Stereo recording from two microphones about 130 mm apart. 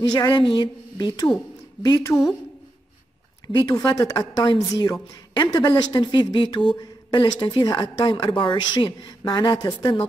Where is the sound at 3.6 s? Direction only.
30° left (ahead or behind).